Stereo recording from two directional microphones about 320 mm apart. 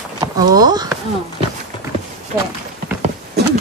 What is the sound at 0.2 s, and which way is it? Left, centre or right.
Speech, centre.